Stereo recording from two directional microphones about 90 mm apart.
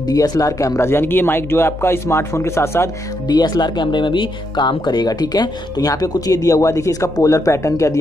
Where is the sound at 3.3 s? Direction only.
50° left (ahead or behind).